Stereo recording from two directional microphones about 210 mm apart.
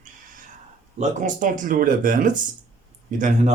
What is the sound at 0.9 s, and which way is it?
Speech, 35° right (ahead or behind).